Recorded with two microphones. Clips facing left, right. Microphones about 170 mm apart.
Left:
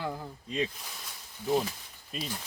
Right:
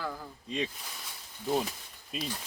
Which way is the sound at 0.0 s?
20° left (ahead or behind).